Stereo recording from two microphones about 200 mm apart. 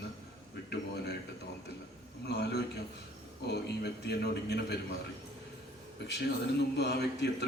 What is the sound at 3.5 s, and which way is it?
A man's voice, 55° left (ahead or behind).